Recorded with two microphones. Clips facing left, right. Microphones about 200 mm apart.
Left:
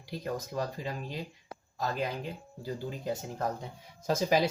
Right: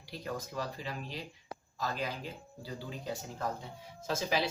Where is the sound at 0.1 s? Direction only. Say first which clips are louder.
Left 4 dB; 45° left (ahead or behind).